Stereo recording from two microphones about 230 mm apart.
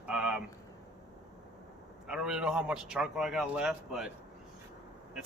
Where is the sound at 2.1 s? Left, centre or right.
Centre.